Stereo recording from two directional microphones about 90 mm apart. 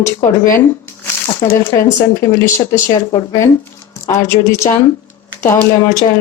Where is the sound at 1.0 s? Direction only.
20° left (ahead or behind).